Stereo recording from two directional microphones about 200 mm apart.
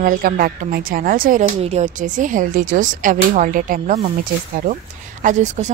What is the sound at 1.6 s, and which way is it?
Speech, 35° right (ahead or behind).